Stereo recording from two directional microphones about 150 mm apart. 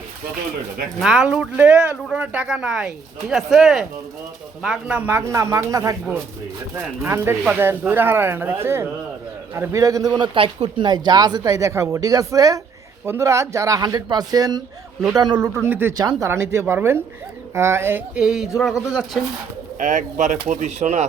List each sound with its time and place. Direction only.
0.9 s speech: 5° right (ahead or behind); by 6.0 s 20° right (ahead or behind)
7.0 s speech: 15° right (ahead or behind)
10.3 s speech: 35° right (ahead or behind)
15.4 s speech: 15° right (ahead or behind); by 19.2 s centre (ahead or behind)
19.8 s speech: 55° right (ahead or behind)